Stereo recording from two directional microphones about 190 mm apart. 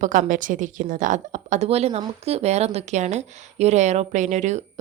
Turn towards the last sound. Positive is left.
turn(degrees=-40)  # may be behind; listen again after turning